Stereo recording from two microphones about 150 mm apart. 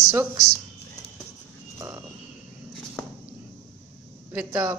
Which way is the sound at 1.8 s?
15° right (ahead or behind).